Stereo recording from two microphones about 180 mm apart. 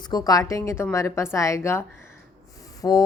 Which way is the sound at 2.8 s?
20° left (ahead or behind).